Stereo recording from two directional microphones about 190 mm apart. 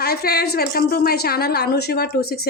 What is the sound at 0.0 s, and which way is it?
A woman's voice, 55° left (ahead or behind).